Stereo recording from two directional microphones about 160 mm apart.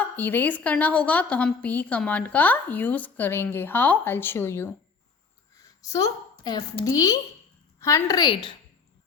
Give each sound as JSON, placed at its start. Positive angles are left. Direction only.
{"t": 0.2, "sound": "a woman's voice", "side_deg": 10}
{"t": 5.5, "sound": "a sound", "side_deg": 20}
{"t": 6.8, "sound": "a woman's voice", "side_deg": 20}